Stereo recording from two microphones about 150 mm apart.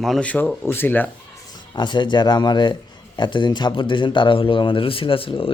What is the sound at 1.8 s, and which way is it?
Speech, 30° left (ahead or behind).